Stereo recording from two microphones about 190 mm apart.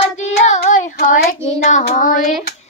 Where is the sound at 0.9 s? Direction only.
50° left (ahead or behind).